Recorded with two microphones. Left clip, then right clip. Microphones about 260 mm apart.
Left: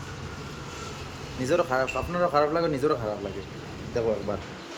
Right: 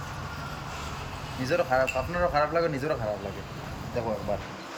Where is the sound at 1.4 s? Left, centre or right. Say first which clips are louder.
Even; centre.